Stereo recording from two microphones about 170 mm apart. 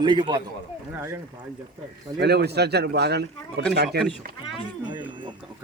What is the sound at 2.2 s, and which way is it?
A man's voice, 75° right (ahead or behind).